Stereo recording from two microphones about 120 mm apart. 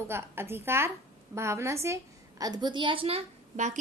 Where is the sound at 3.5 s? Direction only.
90° right.